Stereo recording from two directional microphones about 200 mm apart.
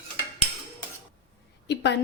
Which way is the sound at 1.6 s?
60° left (ahead or behind).